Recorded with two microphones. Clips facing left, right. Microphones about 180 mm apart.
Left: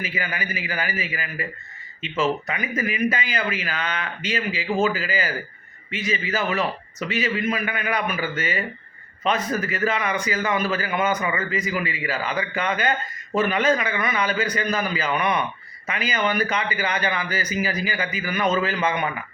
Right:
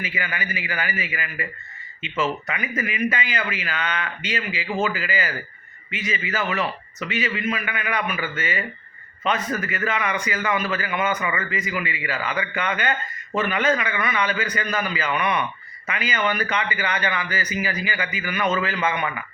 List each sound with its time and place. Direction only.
0.0 s speech: 40° left (ahead or behind)